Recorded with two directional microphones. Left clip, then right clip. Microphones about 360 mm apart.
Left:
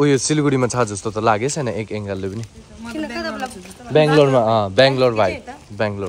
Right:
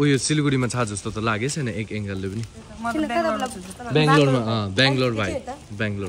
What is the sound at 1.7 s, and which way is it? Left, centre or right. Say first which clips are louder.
Speech: left 6 dB; centre.